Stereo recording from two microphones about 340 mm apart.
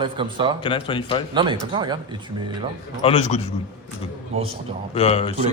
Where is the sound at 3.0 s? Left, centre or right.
Centre.